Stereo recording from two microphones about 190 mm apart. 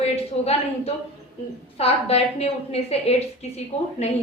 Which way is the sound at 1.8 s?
30° left (ahead or behind).